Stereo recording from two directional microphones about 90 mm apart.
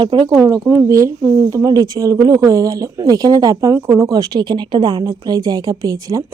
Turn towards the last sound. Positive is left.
turn(degrees=-40)  # may be behind; listen again after turning